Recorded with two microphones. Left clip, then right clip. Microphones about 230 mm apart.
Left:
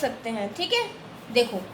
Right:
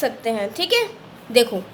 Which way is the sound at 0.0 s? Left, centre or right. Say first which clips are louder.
Right 6 dB; right.